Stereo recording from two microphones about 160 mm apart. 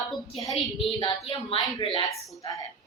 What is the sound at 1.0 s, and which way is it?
Speech, 30° left (ahead or behind).